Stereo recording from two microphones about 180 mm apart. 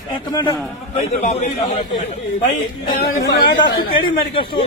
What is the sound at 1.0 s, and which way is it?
Speech, 55° left (ahead or behind).